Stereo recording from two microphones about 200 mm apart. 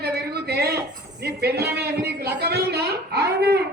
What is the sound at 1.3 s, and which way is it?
A woman's voice, 55° right (ahead or behind).